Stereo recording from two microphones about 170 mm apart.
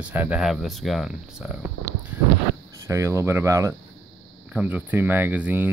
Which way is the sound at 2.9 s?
15° right (ahead or behind).